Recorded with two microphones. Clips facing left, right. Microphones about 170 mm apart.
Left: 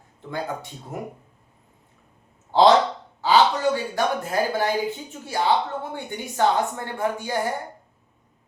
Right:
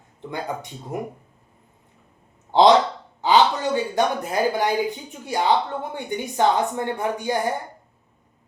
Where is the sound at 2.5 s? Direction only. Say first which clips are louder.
Right 1 dB; 20° right (ahead or behind).